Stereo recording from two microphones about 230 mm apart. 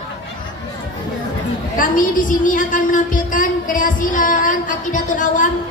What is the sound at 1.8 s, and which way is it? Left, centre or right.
A woman's voice, left.